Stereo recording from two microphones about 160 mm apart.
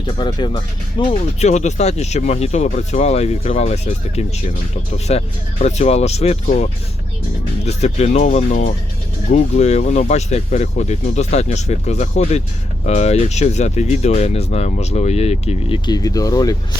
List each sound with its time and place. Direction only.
0.0 s speech: 30° left (ahead or behind)
15.9 s speech: 25° left (ahead or behind)